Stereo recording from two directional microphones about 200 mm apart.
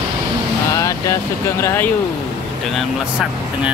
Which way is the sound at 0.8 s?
15° left (ahead or behind).